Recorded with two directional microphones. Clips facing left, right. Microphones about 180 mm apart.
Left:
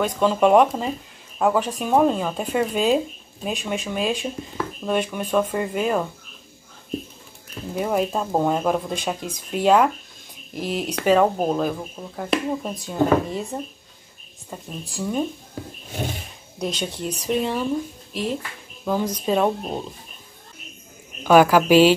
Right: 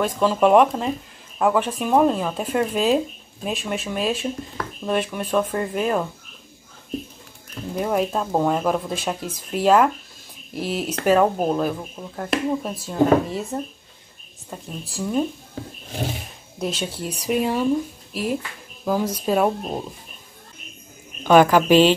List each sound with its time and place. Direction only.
0.0 s speech: centre (ahead or behind)
7.7 s speech: centre (ahead or behind)
21.2 s a woman's voice: 5° left (ahead or behind)